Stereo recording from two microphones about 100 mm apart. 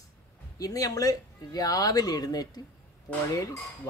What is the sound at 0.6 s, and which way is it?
Speech, 40° left (ahead or behind).